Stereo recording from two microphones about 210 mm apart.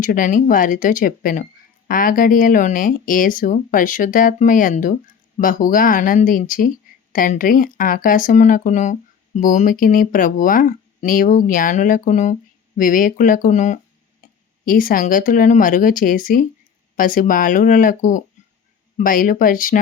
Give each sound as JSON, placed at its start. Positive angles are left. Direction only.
{"t": 0.0, "sound": "speech", "side_deg": 40}